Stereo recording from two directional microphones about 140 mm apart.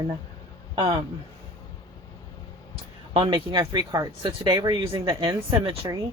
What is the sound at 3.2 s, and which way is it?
Speech, 25° right (ahead or behind).